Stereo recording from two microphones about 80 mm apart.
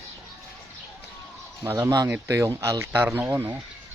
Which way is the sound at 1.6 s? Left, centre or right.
Right.